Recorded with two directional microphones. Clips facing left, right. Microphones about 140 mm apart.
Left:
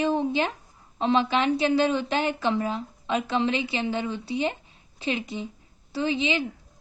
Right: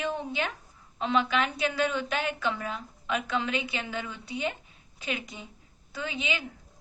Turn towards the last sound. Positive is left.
turn(degrees=30)  # may be behind; listen again after turning